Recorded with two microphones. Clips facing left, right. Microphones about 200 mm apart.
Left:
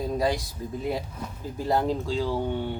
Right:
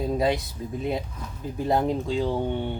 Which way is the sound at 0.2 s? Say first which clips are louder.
Right 2 dB; 25° right (ahead or behind).